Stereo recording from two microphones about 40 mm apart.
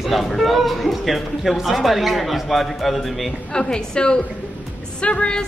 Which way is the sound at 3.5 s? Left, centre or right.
Centre.